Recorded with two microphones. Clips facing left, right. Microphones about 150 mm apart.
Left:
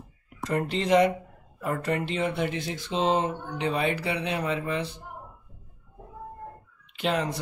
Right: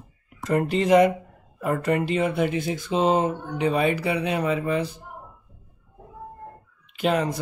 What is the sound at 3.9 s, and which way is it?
Speech, 50° right (ahead or behind).